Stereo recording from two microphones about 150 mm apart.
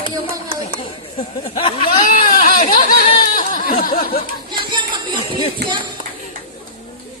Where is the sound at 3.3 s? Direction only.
60° left (ahead or behind).